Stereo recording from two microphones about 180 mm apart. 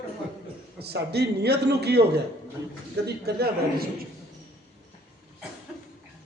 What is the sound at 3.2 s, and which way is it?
Speech, 60° right (ahead or behind).